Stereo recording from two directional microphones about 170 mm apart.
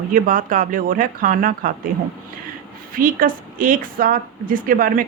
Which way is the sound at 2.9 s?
55° right (ahead or behind).